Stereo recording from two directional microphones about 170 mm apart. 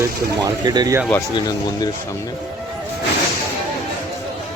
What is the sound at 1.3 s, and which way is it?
Speech, 25° left (ahead or behind).